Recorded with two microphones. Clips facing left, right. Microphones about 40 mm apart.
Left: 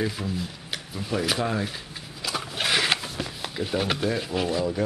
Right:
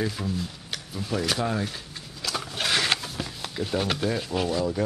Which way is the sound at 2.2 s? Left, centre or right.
Centre.